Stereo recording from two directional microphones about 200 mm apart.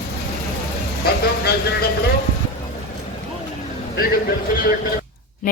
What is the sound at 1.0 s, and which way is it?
Speech, 50° left (ahead or behind).